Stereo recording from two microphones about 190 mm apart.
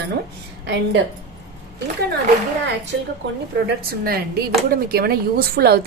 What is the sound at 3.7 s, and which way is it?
A woman's voice, 55° right (ahead or behind).